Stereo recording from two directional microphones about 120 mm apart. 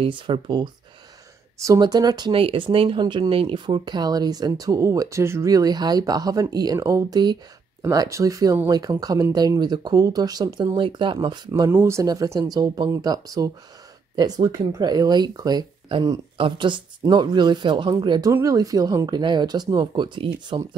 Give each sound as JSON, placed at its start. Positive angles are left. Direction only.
{"t": 0.0, "sound": "speech", "side_deg": -45}
{"t": 2.3, "sound": "speech", "side_deg": -45}
{"t": 11.7, "sound": "speech", "side_deg": -25}
{"t": 16.3, "sound": "speech", "side_deg": -45}
{"t": 18.3, "sound": "speech", "side_deg": -25}